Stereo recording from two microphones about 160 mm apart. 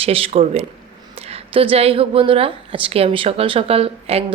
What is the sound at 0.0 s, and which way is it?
A woman's voice, 40° right (ahead or behind).